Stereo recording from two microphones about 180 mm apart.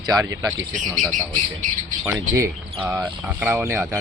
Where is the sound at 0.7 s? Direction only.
45° right (ahead or behind).